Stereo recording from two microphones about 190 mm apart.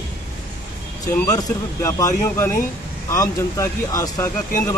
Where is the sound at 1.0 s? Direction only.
15° left (ahead or behind).